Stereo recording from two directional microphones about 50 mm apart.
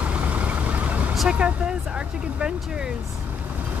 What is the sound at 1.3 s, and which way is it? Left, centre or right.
Speech, right.